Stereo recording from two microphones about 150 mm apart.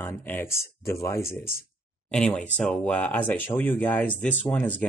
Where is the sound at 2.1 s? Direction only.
5° left (ahead or behind).